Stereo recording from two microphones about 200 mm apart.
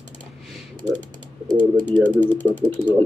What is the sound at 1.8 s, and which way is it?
Speech, 10° left (ahead or behind).